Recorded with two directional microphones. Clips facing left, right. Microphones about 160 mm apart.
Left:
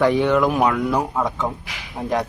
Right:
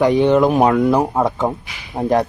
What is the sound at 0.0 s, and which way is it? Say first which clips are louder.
Speech: right 4 dB; 20° right (ahead or behind).